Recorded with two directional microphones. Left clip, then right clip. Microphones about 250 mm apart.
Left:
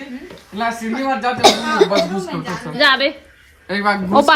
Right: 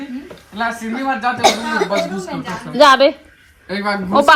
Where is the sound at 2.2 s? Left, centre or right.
Centre.